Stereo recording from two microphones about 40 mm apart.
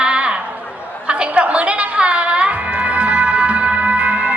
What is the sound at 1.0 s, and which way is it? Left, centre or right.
Music, right.